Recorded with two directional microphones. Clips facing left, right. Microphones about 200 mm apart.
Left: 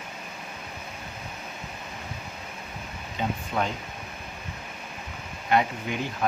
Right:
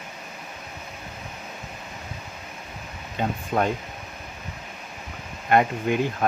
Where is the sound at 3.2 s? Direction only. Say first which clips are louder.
Right 3 dB; 55° right (ahead or behind).